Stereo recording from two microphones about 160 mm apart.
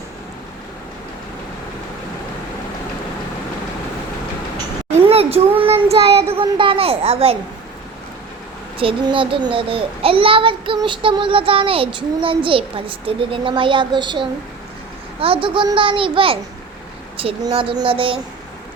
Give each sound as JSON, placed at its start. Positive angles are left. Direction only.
{"t": 4.9, "sound": "child singing", "side_deg": -40}
{"t": 6.3, "sound": "a child's voice", "side_deg": -30}
{"t": 8.8, "sound": "a child's voice", "side_deg": -35}